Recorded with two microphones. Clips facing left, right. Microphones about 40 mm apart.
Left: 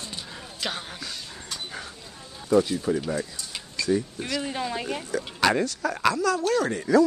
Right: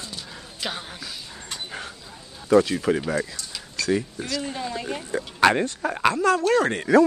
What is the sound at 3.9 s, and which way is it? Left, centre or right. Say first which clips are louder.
Speech: right 1 dB; right.